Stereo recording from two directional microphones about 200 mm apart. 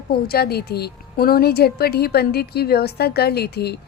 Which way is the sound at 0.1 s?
50° left (ahead or behind).